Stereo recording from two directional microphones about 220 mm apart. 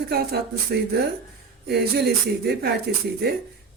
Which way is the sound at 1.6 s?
50° right (ahead or behind).